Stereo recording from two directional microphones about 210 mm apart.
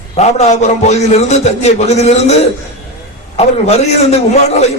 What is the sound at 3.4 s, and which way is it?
A man's voice, 30° left (ahead or behind).